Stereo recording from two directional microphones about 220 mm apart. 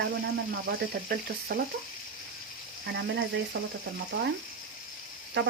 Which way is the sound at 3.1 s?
55° right (ahead or behind).